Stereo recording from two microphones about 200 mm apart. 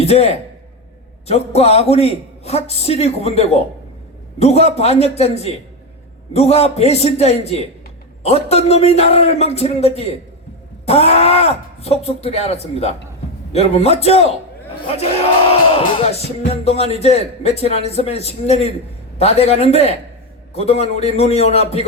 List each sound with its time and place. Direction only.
0.0 s a man's voice: 30° left (ahead or behind)